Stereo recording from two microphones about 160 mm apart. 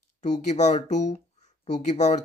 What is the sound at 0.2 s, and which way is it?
Speech, 45° left (ahead or behind).